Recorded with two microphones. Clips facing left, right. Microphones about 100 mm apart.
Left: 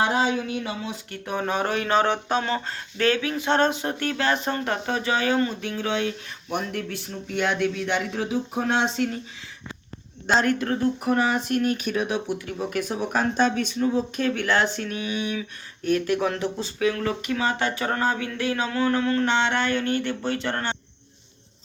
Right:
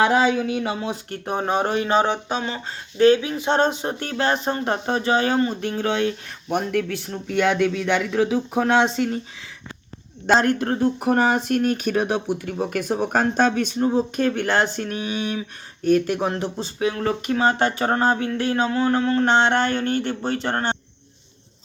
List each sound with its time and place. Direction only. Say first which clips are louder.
0.0 s speech: right 5 dB; 70° right (ahead or behind); by 2.1 s 20° right (ahead or behind)
2.3 s speech: left 2 dB; 10° right (ahead or behind)
3.0 s speech: right 7 dB; 25° right (ahead or behind); by 6.7 s 50° right (ahead or behind)
6.7 s speech: right 7 dB; 60° right (ahead or behind)
10.3 s speech: right 3 dB; 35° right (ahead or behind)